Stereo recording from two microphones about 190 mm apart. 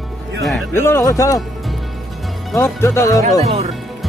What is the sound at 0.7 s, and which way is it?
Speech, 15° left (ahead or behind).